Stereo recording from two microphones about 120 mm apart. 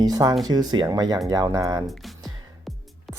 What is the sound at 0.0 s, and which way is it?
Speech, 30° right (ahead or behind).